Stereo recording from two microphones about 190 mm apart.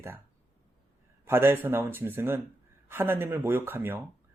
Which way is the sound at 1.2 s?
10° right (ahead or behind).